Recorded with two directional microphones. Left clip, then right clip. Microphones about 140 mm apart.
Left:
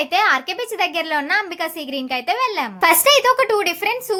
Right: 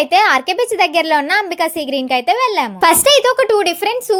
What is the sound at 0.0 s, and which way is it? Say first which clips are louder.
A woman's voice: right 5 dB; 40° right (ahead or behind).